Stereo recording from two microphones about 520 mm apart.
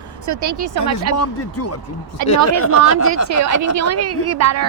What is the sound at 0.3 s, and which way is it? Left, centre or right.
Speech, right.